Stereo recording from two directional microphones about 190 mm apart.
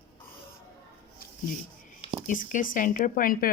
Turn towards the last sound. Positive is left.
turn(degrees=50)  # may be behind; listen again after turning